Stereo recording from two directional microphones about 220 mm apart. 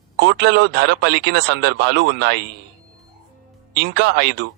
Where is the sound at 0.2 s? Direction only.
50° right (ahead or behind).